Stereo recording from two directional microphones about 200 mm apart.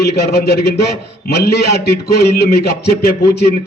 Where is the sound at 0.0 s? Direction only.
55° left (ahead or behind).